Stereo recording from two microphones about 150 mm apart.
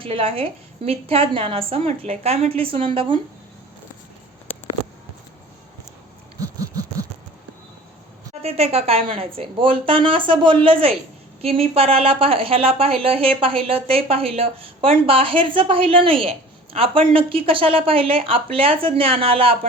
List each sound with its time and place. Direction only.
0.0 s a woman's voice: 40° right (ahead or behind)
6.4 s a sound: 25° right (ahead or behind)
8.3 s a woman's voice: 45° right (ahead or behind)